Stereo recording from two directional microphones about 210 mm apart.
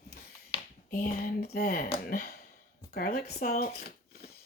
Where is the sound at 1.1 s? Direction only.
50° left (ahead or behind).